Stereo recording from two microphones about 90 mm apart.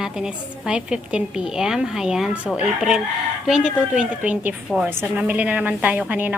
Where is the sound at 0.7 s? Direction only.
10° right (ahead or behind).